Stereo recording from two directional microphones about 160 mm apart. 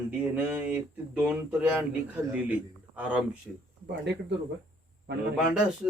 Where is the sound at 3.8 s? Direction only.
85° right.